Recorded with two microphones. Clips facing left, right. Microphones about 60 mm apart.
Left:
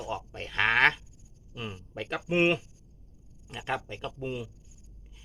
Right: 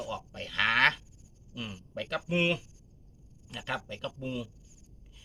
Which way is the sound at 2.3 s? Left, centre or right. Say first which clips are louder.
Left 5 dB; left.